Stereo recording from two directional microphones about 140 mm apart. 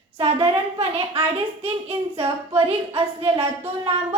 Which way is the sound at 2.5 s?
45° right (ahead or behind).